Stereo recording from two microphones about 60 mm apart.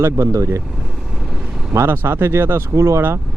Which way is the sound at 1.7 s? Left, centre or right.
Right.